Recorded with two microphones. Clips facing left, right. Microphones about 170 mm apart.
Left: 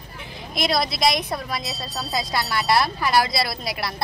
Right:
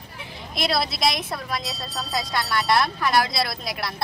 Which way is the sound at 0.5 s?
Centre (ahead or behind).